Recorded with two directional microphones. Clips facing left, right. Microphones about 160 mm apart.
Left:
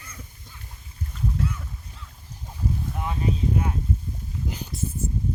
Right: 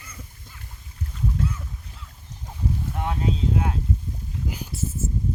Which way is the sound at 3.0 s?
85° right.